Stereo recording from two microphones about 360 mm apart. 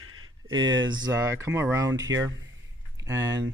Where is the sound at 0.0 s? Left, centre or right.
Right.